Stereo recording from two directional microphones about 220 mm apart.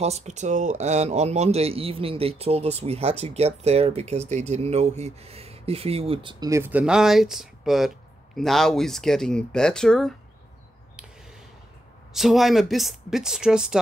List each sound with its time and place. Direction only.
0.0 s speech: 30° right (ahead or behind); by 10.1 s centre (ahead or behind)
12.1 s speech: centre (ahead or behind)